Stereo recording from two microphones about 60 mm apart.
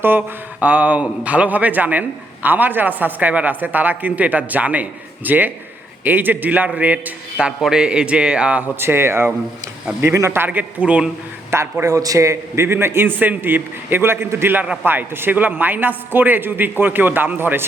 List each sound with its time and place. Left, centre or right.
0.0 s a man's voice: right
0.6 s a man's voice: right
7.7 s a man's voice: centre
8.8 s speech: right
10.4 s a man's voice: right
11.5 s speech: right
11.9 s a man's voice: right
12.6 s a man's voice: right